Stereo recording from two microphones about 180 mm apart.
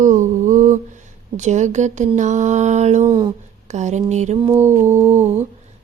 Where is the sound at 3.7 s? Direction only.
40° right (ahead or behind).